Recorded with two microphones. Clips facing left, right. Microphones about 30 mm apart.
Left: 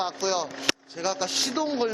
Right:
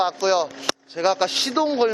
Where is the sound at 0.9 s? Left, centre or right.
Right.